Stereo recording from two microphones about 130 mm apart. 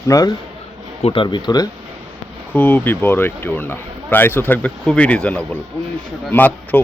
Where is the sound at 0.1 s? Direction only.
25° left (ahead or behind).